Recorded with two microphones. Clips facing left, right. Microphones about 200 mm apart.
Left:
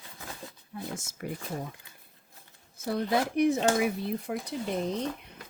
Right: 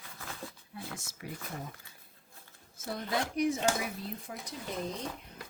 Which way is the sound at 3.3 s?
60° left (ahead or behind).